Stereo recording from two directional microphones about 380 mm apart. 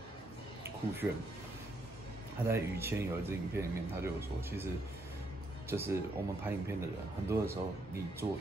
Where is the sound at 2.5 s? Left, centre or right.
Centre.